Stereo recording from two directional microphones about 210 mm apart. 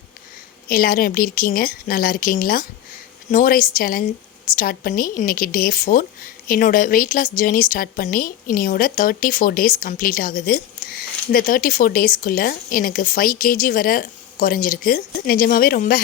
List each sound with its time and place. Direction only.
0.7 s a woman's voice: 45° left (ahead or behind)